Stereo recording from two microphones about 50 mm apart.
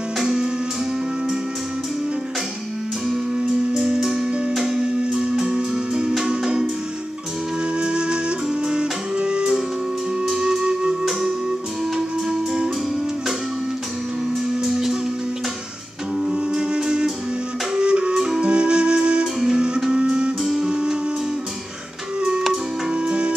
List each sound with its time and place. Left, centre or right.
0.2 s music: centre
3.7 s music: centre
7.7 s music: centre
14.6 s music: centre
16.2 s music: centre
17.7 s flute: centre
19.9 s music: centre
22.5 s music: centre